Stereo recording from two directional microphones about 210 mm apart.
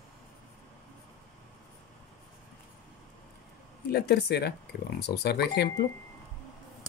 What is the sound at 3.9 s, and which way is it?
Speech, 50° left (ahead or behind).